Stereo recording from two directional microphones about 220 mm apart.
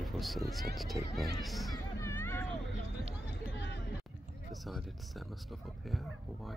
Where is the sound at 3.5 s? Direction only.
50° left (ahead or behind).